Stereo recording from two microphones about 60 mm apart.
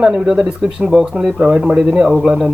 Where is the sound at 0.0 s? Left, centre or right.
Centre.